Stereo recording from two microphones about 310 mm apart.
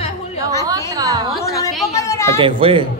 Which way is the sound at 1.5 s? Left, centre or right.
Centre.